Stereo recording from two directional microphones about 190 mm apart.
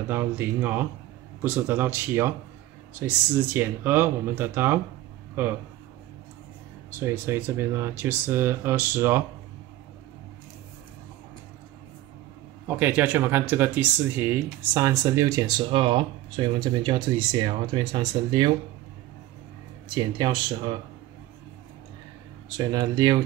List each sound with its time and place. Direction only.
0.1 s speech: 10° right (ahead or behind)
3.5 s speech: 10° right (ahead or behind)
6.9 s speech: 15° right (ahead or behind)
12.6 s speech: 10° right (ahead or behind)
19.9 s speech: 25° right (ahead or behind)
22.6 s speech: 20° right (ahead or behind)